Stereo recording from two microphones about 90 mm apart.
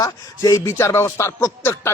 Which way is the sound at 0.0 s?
35° left (ahead or behind).